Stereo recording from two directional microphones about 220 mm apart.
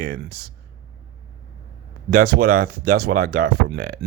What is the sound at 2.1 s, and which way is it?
Speech, 45° right (ahead or behind).